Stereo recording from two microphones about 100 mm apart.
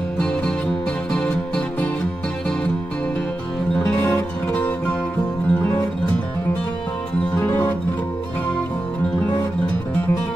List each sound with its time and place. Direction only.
3.7 s music: 15° left (ahead or behind)
7.3 s music: 20° left (ahead or behind)